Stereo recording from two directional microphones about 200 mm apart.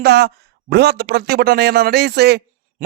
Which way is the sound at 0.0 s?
55° right (ahead or behind).